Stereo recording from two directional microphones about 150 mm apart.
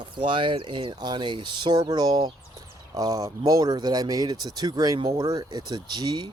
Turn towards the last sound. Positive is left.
turn(degrees=-30)  # may be behind; listen again after turning